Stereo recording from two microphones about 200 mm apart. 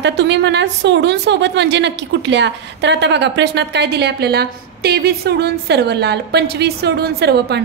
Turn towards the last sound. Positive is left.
turn(degrees=-55)  # may be behind; listen again after turning